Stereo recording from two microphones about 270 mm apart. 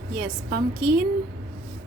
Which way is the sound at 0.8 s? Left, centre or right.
Right.